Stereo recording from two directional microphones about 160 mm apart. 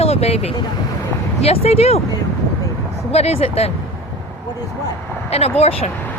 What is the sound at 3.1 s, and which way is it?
Speech, 40° left (ahead or behind).